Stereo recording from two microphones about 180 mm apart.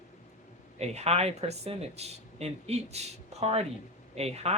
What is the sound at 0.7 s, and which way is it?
Speech, 35° right (ahead or behind).